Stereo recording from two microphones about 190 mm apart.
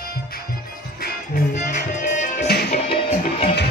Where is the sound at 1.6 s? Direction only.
40° left (ahead or behind).